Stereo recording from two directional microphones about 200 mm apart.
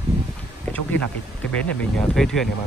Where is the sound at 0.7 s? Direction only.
5° left (ahead or behind).